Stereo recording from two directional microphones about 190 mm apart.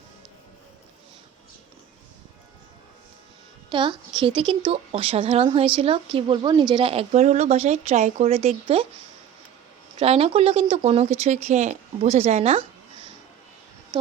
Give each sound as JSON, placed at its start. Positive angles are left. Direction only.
{"t": 3.7, "sound": "a woman's voice", "side_deg": -25}
{"t": 10.0, "sound": "speech", "side_deg": -30}